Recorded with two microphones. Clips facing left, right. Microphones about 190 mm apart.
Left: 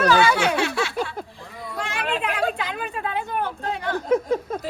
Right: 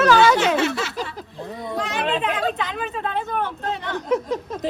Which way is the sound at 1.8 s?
Centre (ahead or behind).